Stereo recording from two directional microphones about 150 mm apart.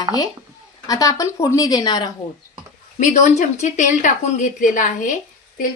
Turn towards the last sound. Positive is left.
turn(degrees=65)  # may be behind; listen again after turning